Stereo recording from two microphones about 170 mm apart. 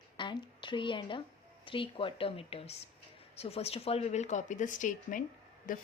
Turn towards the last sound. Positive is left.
turn(degrees=50)  # may be behind; listen again after turning